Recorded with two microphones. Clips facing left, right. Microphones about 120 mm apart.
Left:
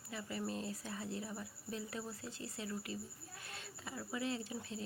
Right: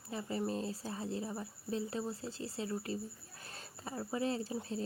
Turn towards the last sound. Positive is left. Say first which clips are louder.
# right 5 dB
turn(degrees=-35)  # may be behind; listen again after turning